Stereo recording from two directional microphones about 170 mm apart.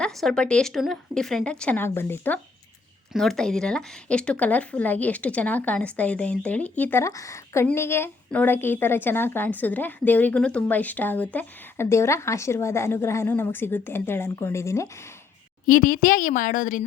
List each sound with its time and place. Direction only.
0.0 s speech: 5° left (ahead or behind)
15.6 s a woman's voice: 50° left (ahead or behind)